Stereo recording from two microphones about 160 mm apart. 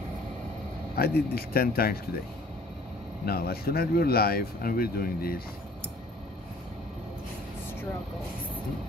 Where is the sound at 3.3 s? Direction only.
75° left (ahead or behind).